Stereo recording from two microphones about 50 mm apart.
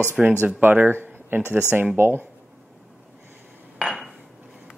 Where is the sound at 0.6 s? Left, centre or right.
Right.